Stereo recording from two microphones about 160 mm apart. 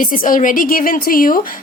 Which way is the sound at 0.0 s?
60° left (ahead or behind).